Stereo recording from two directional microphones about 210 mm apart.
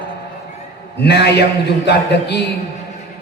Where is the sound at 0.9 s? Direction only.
55° left (ahead or behind).